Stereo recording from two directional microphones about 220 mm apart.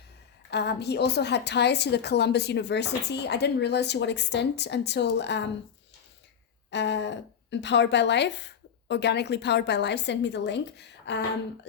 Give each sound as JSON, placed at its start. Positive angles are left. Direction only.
{"t": 0.5, "sound": "a woman's voice", "side_deg": 50}
{"t": 6.7, "sound": "a woman's voice", "side_deg": 50}